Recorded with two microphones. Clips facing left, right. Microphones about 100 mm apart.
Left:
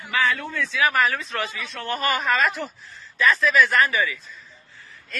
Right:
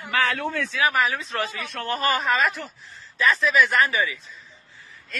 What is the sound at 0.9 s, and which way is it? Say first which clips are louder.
Speech: left 1 dB; 10° right (ahead or behind).